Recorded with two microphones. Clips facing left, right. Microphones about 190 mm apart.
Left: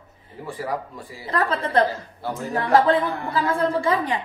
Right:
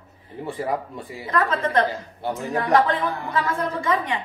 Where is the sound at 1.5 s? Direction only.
35° left (ahead or behind).